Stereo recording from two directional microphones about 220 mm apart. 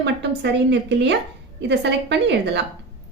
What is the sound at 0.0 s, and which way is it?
A woman's voice, 50° right (ahead or behind).